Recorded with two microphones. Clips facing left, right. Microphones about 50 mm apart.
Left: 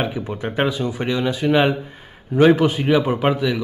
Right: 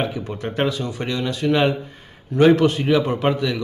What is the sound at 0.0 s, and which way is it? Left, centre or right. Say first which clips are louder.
Speech: left 1 dB; centre.